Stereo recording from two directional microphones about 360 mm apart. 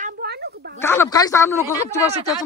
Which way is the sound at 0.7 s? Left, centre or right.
Centre.